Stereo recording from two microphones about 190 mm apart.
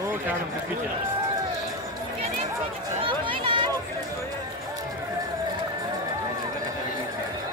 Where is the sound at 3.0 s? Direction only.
25° right (ahead or behind).